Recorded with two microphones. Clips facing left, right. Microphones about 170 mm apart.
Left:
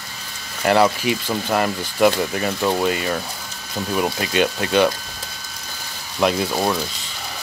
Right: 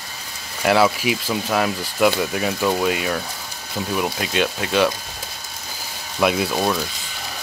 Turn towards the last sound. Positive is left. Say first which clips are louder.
# even
turn(degrees=5)  # may be behind; listen again after turning